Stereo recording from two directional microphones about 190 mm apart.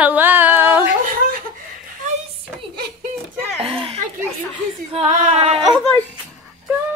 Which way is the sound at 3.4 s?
30° right (ahead or behind).